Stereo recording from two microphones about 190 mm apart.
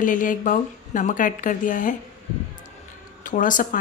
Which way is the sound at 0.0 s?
45° left (ahead or behind).